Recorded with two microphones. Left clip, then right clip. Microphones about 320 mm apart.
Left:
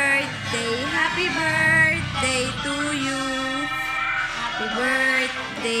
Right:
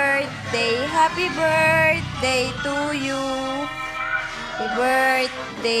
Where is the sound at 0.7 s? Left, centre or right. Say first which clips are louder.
Right 4 dB; right.